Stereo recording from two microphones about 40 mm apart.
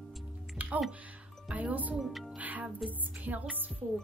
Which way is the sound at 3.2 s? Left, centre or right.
Right.